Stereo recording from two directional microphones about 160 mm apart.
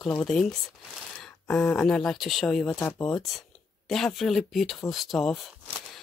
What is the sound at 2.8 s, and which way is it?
Speech, 15° left (ahead or behind).